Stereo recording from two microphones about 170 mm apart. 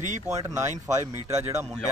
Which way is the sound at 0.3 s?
20° right (ahead or behind).